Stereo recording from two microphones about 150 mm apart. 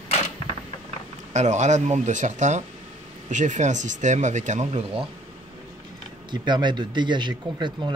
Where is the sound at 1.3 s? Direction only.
50° right (ahead or behind).